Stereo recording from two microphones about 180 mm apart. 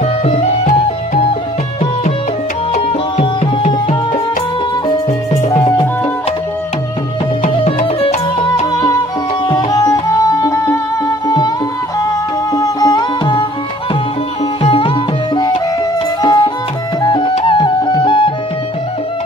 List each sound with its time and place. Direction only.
0.0 s music: 35° left (ahead or behind)
2.7 s music: 35° left (ahead or behind)
7.4 s music: 35° left (ahead or behind)
12.5 s music: 20° left (ahead or behind)
14.6 s sitar: 30° left (ahead or behind)
16.2 s music: 20° left (ahead or behind)